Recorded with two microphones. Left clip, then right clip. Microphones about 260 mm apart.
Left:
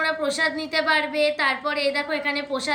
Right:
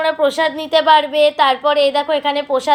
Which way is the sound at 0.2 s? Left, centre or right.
Centre.